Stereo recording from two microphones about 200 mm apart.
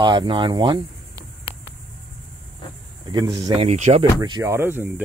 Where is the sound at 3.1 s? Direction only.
20° right (ahead or behind).